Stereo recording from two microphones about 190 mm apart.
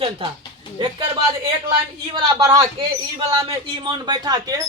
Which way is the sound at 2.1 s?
20° right (ahead or behind).